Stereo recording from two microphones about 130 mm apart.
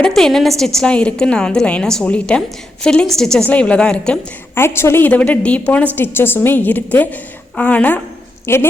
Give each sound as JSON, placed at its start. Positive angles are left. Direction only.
{"t": 0.0, "sound": "a woman's voice", "side_deg": 5}
{"t": 4.5, "sound": "a woman's voice", "side_deg": 20}